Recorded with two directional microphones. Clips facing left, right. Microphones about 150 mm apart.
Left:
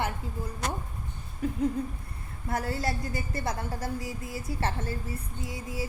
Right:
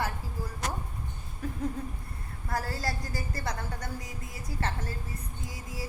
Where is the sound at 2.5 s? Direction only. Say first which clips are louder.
Left 3 dB; 20° left (ahead or behind).